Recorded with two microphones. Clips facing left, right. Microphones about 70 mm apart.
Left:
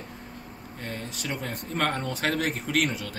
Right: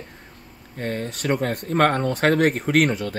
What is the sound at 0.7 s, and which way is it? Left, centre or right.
Speech, right.